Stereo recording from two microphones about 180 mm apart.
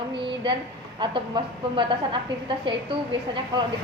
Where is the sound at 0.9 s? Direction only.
25° right (ahead or behind).